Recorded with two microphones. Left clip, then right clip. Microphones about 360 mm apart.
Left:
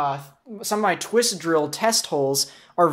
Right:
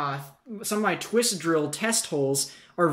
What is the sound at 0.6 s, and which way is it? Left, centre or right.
Speech, centre.